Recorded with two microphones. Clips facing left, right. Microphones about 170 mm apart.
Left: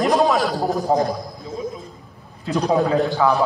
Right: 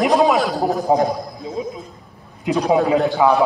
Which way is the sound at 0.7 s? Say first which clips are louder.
Right 3 dB; 20° right (ahead or behind).